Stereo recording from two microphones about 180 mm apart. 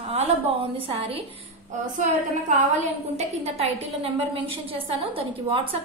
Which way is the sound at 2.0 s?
45° right (ahead or behind).